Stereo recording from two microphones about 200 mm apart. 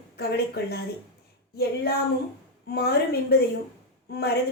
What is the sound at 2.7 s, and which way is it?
Speech, 55° left (ahead or behind).